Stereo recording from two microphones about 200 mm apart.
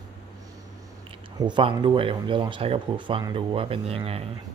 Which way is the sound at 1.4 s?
25° right (ahead or behind).